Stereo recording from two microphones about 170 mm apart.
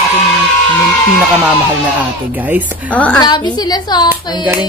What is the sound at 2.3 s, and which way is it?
Speech, 10° right (ahead or behind).